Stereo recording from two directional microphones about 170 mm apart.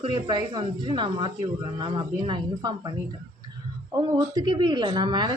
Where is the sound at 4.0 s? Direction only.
25° right (ahead or behind).